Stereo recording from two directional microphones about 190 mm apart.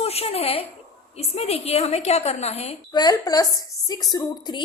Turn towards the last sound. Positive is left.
turn(degrees=20)  # may be behind; listen again after turning